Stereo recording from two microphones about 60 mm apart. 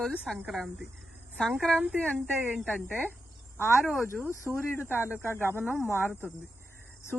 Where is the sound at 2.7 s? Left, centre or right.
Left.